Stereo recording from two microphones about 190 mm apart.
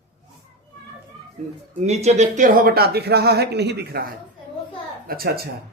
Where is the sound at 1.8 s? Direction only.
35° right (ahead or behind).